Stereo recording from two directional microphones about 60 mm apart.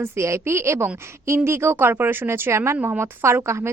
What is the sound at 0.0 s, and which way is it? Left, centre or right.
Speech, right.